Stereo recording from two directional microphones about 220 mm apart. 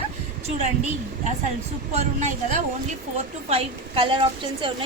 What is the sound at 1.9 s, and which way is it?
A woman's voice, 30° right (ahead or behind).